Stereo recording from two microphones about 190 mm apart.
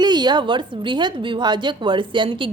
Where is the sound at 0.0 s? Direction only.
20° right (ahead or behind).